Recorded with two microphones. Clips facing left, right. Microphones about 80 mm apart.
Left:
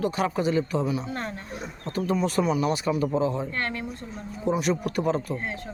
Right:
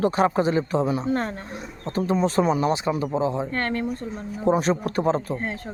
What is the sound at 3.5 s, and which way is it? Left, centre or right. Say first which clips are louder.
Speech: right 5 dB; right.